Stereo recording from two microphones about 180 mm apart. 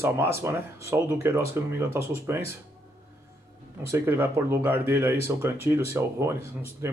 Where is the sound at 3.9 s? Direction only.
15° right (ahead or behind).